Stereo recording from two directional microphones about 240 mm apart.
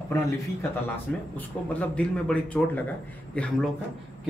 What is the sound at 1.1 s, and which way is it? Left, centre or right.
A man's voice, centre.